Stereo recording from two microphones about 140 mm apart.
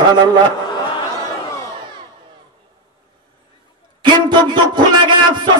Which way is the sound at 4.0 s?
35° right (ahead or behind).